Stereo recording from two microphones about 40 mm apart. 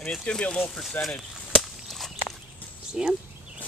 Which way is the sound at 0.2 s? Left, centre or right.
Left.